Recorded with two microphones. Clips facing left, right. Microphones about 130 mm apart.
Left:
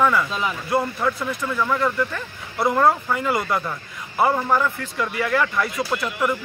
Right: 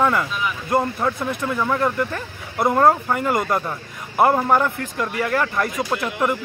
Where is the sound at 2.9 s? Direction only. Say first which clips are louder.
Right 2 dB; 45° right (ahead or behind).